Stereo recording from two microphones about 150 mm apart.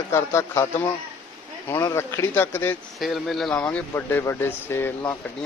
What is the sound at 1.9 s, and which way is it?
Speech, 15° left (ahead or behind).